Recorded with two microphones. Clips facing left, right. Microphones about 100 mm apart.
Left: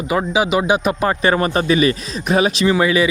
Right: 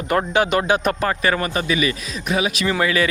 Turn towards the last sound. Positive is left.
turn(degrees=15)  # may be behind; listen again after turning